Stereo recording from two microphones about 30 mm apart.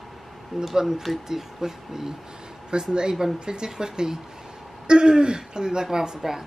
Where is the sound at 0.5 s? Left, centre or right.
Centre.